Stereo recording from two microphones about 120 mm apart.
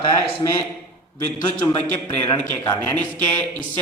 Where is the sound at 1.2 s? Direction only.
15° left (ahead or behind).